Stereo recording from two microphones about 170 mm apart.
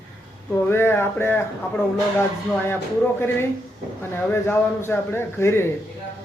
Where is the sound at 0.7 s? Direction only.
15° left (ahead or behind).